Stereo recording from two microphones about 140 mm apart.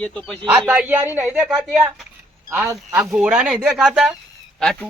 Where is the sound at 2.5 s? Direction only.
15° right (ahead or behind).